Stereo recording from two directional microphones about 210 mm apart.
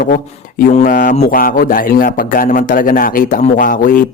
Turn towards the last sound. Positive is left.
turn(degrees=40)  # may be behind; listen again after turning